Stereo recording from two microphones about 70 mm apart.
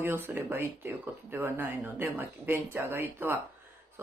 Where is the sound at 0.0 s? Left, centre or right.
Right.